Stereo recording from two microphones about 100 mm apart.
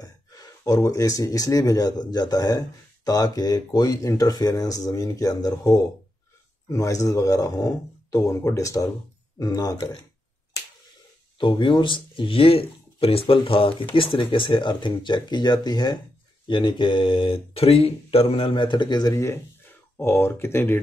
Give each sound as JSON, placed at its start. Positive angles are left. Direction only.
{"t": 0.0, "sound": "speech", "side_deg": 35}
{"t": 11.3, "sound": "speech", "side_deg": 55}
{"t": 20.0, "sound": "speech", "side_deg": 25}